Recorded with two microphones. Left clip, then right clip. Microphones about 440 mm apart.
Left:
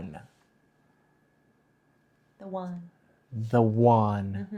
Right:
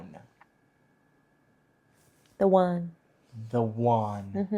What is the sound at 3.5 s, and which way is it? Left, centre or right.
Speech, left.